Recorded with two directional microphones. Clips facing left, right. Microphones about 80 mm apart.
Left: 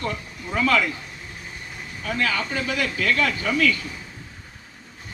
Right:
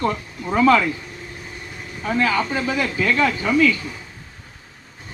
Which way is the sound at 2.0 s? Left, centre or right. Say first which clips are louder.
Right 5 dB; right.